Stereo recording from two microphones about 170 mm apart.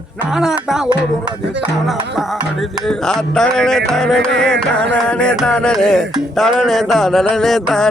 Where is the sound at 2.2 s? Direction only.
Centre (ahead or behind).